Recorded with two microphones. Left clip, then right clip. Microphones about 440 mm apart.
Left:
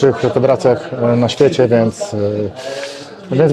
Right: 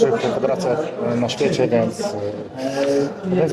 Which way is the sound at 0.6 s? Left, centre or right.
Left.